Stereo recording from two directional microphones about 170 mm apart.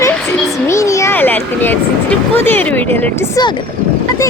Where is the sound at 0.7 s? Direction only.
20° left (ahead or behind).